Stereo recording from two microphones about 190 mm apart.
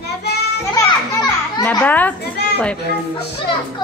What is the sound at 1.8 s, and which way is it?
Speech, 10° left (ahead or behind).